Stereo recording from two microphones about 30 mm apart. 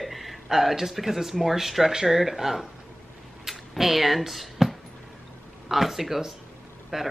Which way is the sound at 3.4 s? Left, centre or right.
Centre.